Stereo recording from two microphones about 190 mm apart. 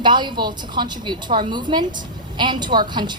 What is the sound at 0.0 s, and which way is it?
A woman's voice, 25° right (ahead or behind).